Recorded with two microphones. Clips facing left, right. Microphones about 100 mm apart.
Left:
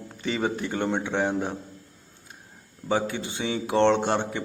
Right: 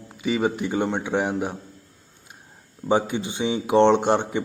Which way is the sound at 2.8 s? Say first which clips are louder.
Right 4 dB; 20° right (ahead or behind).